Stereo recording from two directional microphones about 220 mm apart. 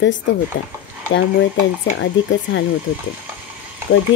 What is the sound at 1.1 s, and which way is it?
Speech, 60° left (ahead or behind).